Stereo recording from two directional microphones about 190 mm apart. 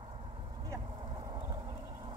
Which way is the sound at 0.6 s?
25° right (ahead or behind).